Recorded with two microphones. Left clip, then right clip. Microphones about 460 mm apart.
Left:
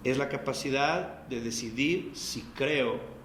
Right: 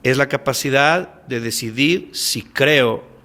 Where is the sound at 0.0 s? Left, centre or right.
Right.